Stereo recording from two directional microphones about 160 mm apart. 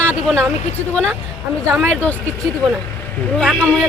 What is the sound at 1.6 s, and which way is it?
Speech, 15° right (ahead or behind).